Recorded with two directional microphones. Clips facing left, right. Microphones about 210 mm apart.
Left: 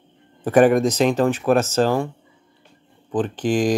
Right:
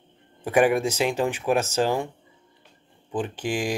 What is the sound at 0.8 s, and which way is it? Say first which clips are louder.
Speech: left 6 dB; 10° right (ahead or behind).